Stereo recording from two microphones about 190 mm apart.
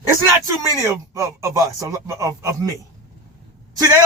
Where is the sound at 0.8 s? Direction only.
15° right (ahead or behind).